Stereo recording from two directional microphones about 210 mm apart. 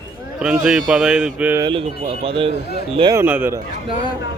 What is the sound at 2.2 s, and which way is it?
Speech, 25° right (ahead or behind).